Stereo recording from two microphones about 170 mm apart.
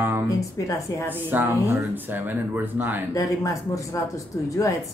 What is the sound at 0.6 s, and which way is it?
Speech, 20° left (ahead or behind).